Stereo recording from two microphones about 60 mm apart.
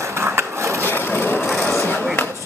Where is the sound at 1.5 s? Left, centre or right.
Left.